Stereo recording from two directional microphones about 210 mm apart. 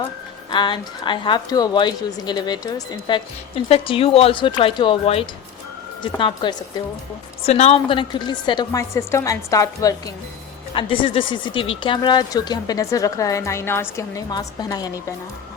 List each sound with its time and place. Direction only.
0.5 s a woman's voice: 20° left (ahead or behind)